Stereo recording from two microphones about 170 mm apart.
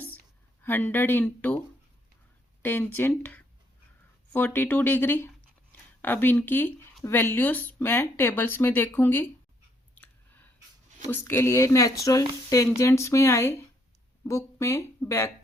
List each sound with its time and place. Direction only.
0.6 s speech: 10° left (ahead or behind)
2.6 s speech: 10° left (ahead or behind)
9.9 s a sound: 10° left (ahead or behind)
11.0 s speech: 15° left (ahead or behind)